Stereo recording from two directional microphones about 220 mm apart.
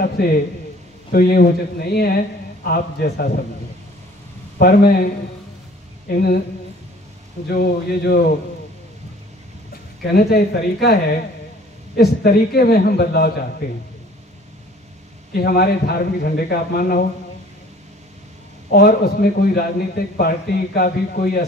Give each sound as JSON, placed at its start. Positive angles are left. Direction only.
{"t": 0.0, "sound": "a man's voice", "side_deg": 40}
{"t": 4.6, "sound": "a man's voice", "side_deg": 45}
{"t": 7.4, "sound": "a man's voice", "side_deg": 45}
{"t": 10.1, "sound": "a man's voice", "side_deg": 45}
{"t": 15.3, "sound": "a man's voice", "side_deg": 45}
{"t": 18.7, "sound": "a man's voice", "side_deg": 45}